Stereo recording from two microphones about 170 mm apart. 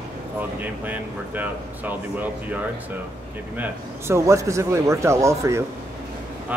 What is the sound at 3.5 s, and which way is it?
A man's voice, 15° right (ahead or behind).